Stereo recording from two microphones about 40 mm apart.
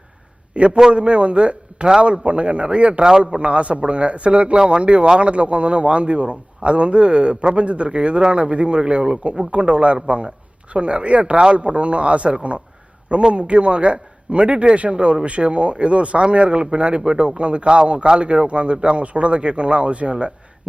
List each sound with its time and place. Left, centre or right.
0.5 s a man's voice: right
3.0 s a man's voice: centre
3.4 s a man's voice: right
4.5 s a man's voice: right